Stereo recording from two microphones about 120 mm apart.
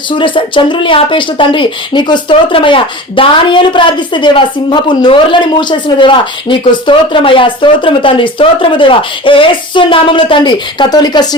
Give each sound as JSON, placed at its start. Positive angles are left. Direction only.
{"t": 0.1, "sound": "speech", "side_deg": 45}